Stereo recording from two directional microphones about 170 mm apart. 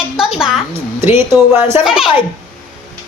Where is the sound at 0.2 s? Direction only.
5° right (ahead or behind).